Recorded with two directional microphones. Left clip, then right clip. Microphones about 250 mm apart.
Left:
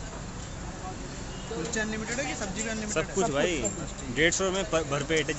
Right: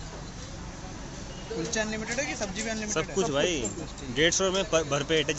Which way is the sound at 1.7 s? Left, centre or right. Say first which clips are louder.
Right 2 dB; right.